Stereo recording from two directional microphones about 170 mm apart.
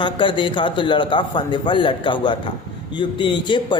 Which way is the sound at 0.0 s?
30° left (ahead or behind).